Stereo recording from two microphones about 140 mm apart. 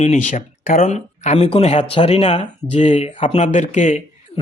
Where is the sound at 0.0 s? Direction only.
55° left (ahead or behind).